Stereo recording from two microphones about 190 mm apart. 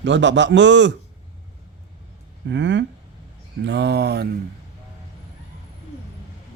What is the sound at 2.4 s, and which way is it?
A man's voice, 70° right (ahead or behind).